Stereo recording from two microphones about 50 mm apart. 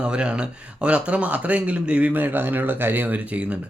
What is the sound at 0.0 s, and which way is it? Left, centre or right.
Speech, centre.